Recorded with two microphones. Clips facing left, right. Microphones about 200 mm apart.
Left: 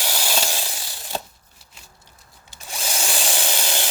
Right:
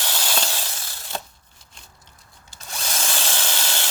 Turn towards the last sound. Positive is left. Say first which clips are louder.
# left 3 dB
turn(degrees=15)  # may be behind; listen again after turning